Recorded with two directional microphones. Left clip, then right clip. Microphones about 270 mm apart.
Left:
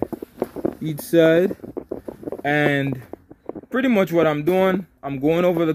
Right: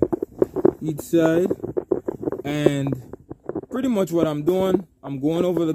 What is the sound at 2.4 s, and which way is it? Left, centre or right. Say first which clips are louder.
Speech: left 4 dB; centre.